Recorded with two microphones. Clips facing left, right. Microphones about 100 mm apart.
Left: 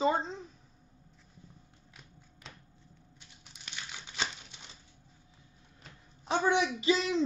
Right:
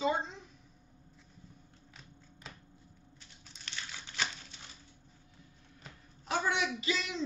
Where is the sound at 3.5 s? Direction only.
15° left (ahead or behind).